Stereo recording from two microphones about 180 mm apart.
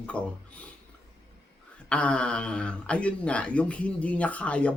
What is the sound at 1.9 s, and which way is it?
Speech, 5° left (ahead or behind).